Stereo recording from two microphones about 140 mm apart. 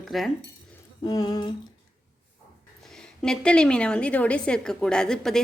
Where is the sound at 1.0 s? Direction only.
25° left (ahead or behind).